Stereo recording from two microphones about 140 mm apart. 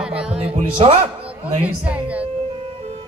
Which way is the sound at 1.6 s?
10° right (ahead or behind).